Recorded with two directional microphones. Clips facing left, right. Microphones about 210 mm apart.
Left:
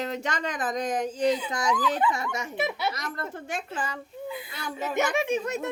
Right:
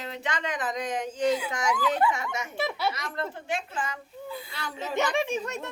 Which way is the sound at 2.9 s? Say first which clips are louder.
Right 1 dB; 45° left (ahead or behind).